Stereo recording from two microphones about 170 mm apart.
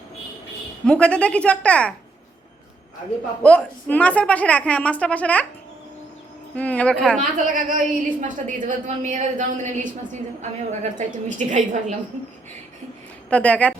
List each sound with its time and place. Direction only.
0.9 s a woman's voice: 5° left (ahead or behind)
3.4 s a woman's voice: 10° left (ahead or behind)
6.6 s a woman's voice: 5° left (ahead or behind)
7.2 s a woman's voice: 50° right (ahead or behind)
13.3 s a woman's voice: 10° left (ahead or behind)